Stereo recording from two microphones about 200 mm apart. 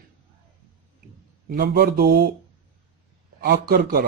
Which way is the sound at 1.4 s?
50° right (ahead or behind).